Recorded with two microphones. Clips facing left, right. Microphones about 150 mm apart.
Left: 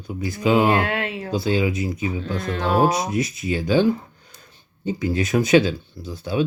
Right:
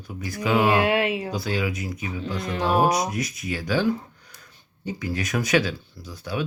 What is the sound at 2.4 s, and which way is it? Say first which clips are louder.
Speech: left 2 dB; 15° right (ahead or behind).